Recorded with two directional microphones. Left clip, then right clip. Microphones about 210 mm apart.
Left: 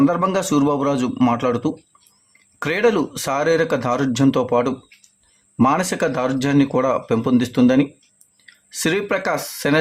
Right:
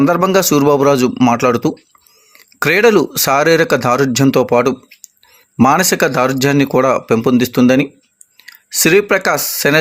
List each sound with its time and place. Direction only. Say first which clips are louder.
0.0 s speech: right 6 dB; 25° right (ahead or behind)